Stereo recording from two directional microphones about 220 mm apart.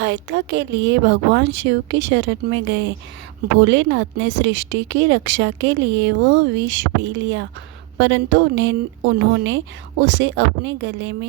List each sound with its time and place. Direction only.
0.0 s speech: 55° right (ahead or behind)